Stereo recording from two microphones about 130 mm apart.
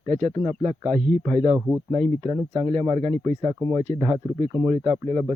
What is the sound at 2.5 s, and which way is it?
A man's voice, 55° right (ahead or behind).